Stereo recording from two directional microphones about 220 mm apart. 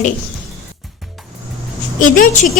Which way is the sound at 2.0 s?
35° left (ahead or behind).